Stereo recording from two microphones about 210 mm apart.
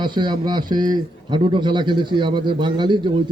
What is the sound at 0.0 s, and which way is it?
A man's voice, 20° right (ahead or behind).